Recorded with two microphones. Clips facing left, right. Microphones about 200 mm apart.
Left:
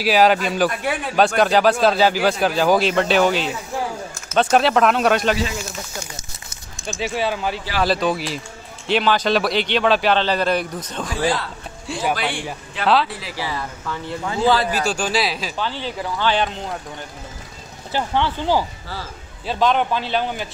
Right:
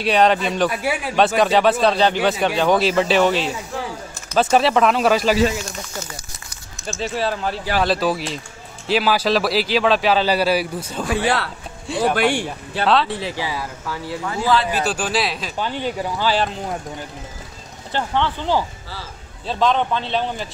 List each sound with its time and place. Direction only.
0.0 s a man's voice: 5° left (ahead or behind)
6.9 s a man's voice: centre (ahead or behind)
11.1 s speech: 70° right (ahead or behind)
11.9 s a man's voice: centre (ahead or behind)
13.1 s speech: 25° right (ahead or behind)
13.5 s a man's voice: 5° right (ahead or behind)
14.2 s speech: 20° left (ahead or behind)
14.7 s a man's voice: 5° right (ahead or behind)
15.5 s speech: 15° right (ahead or behind)
17.9 s a man's voice: 10° left (ahead or behind)